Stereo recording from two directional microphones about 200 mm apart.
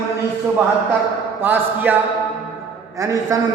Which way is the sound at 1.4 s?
10° right (ahead or behind).